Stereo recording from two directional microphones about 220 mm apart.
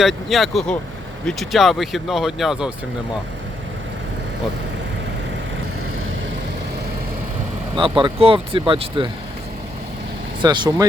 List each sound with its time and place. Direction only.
0.0 s speech: centre (ahead or behind)
7.9 s speech: 25° right (ahead or behind)
10.4 s speech: 20° right (ahead or behind)